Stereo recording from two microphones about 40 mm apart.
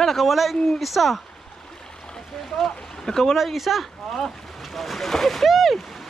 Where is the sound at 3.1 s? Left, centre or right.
Centre.